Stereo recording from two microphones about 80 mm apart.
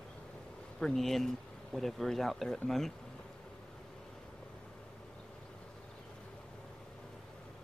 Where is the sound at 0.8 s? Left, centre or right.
Centre.